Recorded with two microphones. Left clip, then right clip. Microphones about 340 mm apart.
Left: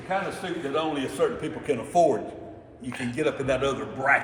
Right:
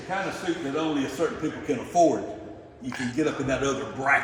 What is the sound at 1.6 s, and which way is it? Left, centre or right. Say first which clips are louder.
Speech: even; left.